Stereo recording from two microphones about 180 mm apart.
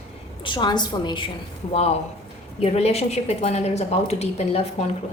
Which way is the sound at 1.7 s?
35° left (ahead or behind).